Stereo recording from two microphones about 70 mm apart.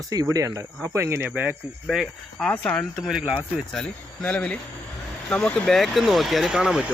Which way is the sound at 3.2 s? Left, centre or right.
Right.